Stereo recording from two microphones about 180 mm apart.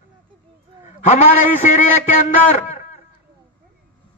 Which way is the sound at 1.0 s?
40° left (ahead or behind).